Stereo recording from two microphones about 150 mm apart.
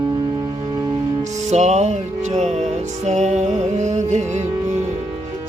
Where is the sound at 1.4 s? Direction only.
50° right (ahead or behind).